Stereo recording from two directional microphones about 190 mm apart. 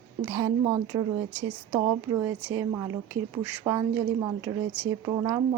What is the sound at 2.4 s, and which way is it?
Speech, 15° right (ahead or behind).